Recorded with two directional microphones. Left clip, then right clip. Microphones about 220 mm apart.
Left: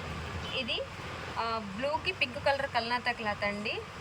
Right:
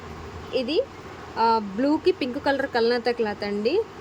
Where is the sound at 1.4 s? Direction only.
35° right (ahead or behind).